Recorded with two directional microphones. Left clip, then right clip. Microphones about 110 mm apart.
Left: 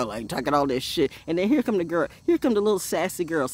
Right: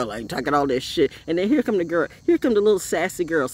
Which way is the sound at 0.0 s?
35° left (ahead or behind).